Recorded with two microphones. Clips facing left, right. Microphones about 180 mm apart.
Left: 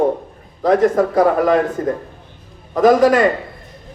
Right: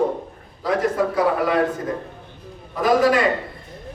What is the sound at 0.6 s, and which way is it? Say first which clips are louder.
Speech: left 7 dB; 45° left (ahead or behind).